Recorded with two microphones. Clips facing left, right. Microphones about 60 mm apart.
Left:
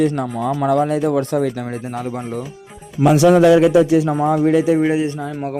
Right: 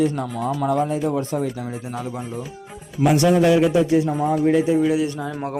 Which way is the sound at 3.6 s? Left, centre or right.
Left.